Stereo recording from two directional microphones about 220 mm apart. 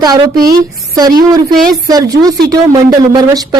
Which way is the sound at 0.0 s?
15° right (ahead or behind).